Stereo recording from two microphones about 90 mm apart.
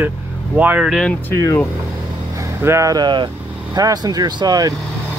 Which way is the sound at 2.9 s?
50° right (ahead or behind).